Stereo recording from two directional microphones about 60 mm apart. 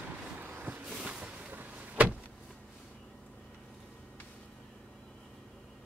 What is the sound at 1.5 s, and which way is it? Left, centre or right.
Vehicle, right.